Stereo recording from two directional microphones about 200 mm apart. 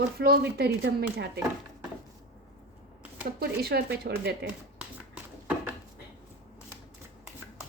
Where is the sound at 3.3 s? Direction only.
50° right (ahead or behind).